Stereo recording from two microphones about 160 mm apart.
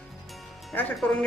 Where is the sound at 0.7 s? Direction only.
10° left (ahead or behind).